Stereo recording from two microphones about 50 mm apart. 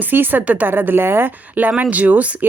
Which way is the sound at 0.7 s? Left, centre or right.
Right.